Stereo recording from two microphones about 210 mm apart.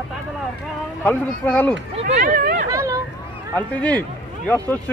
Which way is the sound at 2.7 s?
15° right (ahead or behind).